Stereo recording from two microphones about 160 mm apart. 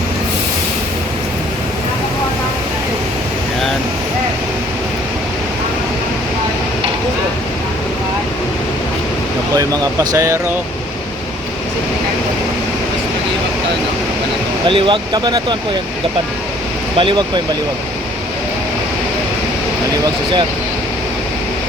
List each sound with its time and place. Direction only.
9.6 s speech: 25° right (ahead or behind)
14.7 s speech: 30° right (ahead or behind)
17.0 s speech: 30° right (ahead or behind)